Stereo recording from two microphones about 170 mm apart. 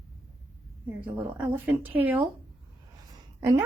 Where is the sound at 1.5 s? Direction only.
10° right (ahead or behind).